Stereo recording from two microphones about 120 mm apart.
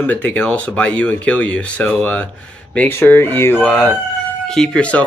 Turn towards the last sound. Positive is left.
turn(degrees=10)  # may be behind; listen again after turning